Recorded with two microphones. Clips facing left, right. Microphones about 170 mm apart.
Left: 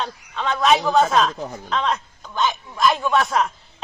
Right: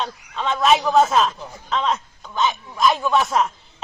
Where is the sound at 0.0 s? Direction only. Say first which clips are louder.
Even; centre (ahead or behind).